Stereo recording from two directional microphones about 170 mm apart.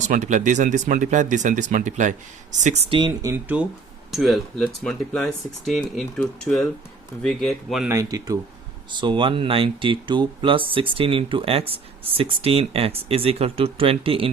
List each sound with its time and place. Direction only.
0.0 s speech: 45° right (ahead or behind)
2.9 s speech: 25° right (ahead or behind); by 7.9 s centre (ahead or behind)
7.9 s speech: 20° right (ahead or behind)